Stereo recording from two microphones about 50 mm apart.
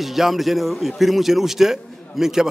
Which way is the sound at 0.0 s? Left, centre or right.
Centre.